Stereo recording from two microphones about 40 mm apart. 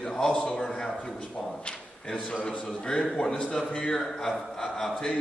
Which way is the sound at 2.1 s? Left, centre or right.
Centre.